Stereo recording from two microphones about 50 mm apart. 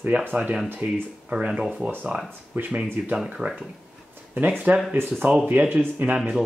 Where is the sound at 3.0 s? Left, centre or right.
Right.